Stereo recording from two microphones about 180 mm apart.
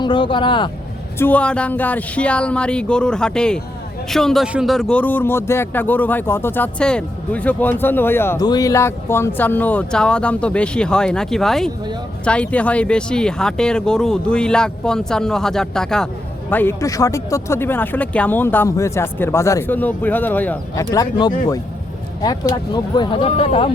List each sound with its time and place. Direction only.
0.0 s speech: 25° left (ahead or behind)
1.2 s speech: 10° left (ahead or behind)
20.9 s speech: 20° left (ahead or behind)